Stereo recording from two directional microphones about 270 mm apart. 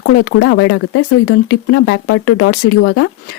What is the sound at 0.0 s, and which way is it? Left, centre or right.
Speech, left.